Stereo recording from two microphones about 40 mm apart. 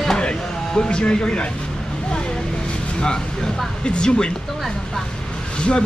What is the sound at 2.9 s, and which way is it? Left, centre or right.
Speech, centre.